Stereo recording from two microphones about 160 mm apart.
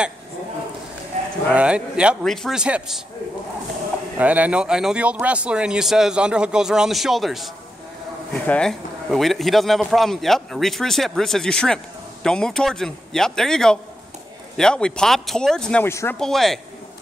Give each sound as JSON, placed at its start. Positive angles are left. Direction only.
{"t": 1.1, "sound": "livestock", "side_deg": -45}
{"t": 1.5, "sound": "a man's voice", "side_deg": -5}
{"t": 4.2, "sound": "a man's voice", "side_deg": -10}
{"t": 15.9, "sound": "speech", "side_deg": 15}
{"t": 16.2, "sound": "speech", "side_deg": 0}